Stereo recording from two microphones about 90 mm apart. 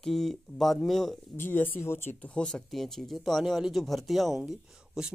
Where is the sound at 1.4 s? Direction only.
20° left (ahead or behind).